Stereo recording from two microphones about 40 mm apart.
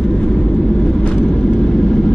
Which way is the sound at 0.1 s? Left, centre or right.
Left.